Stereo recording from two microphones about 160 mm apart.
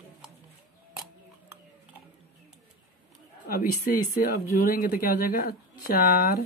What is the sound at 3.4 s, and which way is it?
Speech, 75° left (ahead or behind).